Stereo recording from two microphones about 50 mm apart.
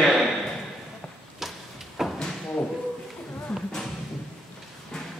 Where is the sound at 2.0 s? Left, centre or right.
Centre.